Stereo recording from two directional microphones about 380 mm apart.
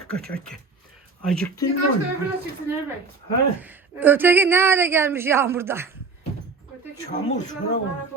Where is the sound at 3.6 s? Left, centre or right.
Centre.